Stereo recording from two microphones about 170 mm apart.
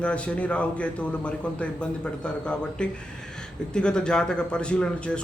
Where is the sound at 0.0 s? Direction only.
5° left (ahead or behind).